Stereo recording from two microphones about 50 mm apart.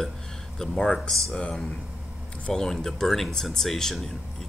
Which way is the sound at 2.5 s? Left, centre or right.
Centre.